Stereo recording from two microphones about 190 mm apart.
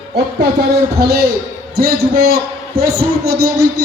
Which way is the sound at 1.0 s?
55° right (ahead or behind).